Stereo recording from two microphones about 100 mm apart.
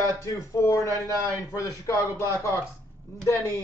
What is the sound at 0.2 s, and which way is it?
Speech, 30° left (ahead or behind).